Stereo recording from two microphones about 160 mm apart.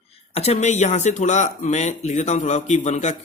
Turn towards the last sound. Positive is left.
turn(degrees=50)  # may be behind; listen again after turning